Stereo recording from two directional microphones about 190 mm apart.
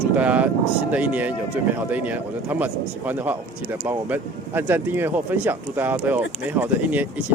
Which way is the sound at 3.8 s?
10° right (ahead or behind).